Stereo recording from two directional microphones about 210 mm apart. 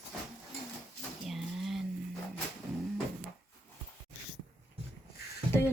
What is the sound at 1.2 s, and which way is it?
Vehicle, centre (ahead or behind).